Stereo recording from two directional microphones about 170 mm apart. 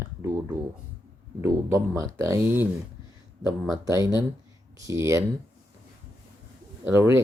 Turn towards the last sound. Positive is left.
turn(degrees=-15)  # may be behind; listen again after turning